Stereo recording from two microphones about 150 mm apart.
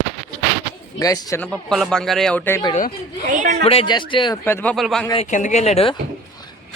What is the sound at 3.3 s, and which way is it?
Speech, 60° right (ahead or behind).